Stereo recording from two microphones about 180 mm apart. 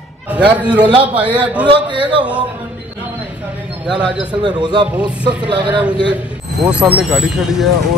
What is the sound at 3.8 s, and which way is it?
Speech, 5° right (ahead or behind).